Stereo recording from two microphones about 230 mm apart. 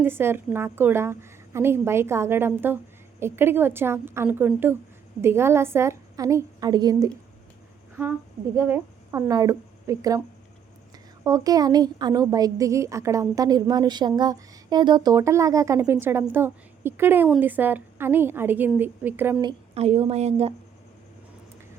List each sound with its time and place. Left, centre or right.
0.0 s a woman's voice: centre
8.5 s a woman's voice: centre
19.5 s a woman's voice: right